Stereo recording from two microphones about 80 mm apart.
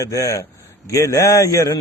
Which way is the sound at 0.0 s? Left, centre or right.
Left.